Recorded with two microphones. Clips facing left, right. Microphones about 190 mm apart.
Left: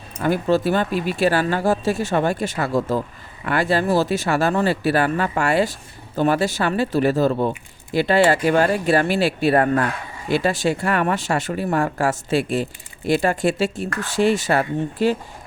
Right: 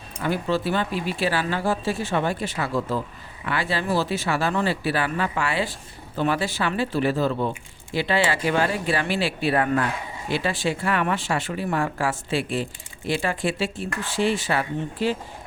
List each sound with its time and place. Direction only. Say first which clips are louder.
0.2 s speech: left 5 dB; 45° left (ahead or behind)